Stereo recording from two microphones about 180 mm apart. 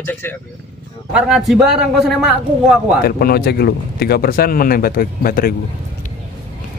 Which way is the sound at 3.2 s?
60° left (ahead or behind).